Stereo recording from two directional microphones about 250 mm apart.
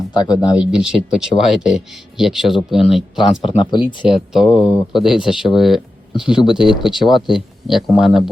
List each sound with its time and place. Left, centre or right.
0.1 s speech: centre
0.6 s speech: centre
3.4 s speech: centre
4.1 s speech: centre